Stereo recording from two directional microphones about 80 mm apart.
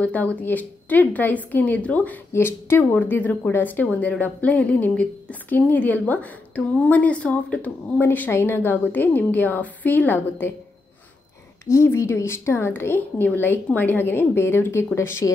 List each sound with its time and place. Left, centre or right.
0.0 s a woman's voice: centre
2.3 s a woman's voice: left
11.6 s a woman's voice: left